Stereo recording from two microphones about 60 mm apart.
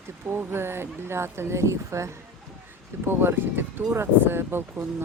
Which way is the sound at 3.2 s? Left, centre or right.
Right.